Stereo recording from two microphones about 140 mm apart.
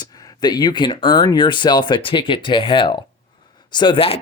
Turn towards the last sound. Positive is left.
turn(degrees=40)  # may be behind; listen again after turning